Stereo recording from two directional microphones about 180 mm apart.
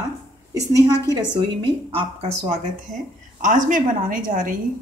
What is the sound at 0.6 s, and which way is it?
Speech, 20° right (ahead or behind).